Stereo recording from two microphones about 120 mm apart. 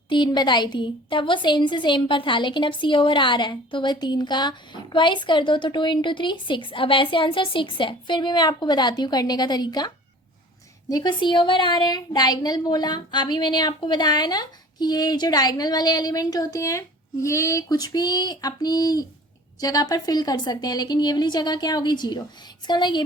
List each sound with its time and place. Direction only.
0.1 s a woman's voice: 40° left (ahead or behind)